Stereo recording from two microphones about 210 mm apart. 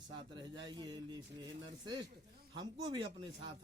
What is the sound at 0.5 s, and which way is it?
Speech, 20° right (ahead or behind).